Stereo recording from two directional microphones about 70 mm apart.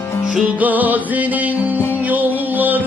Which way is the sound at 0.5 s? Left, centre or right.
Right.